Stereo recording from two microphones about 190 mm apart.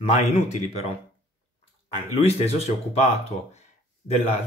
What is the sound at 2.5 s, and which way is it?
Speech, 35° left (ahead or behind).